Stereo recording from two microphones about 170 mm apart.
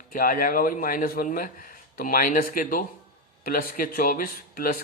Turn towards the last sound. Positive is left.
turn(degrees=55)  # may be behind; listen again after turning